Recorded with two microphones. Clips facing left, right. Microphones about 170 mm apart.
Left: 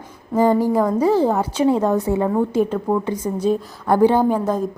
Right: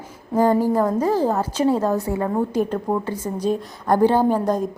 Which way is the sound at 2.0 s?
20° left (ahead or behind).